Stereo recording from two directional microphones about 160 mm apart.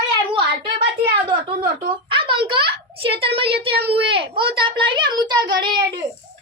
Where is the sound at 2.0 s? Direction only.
30° right (ahead or behind).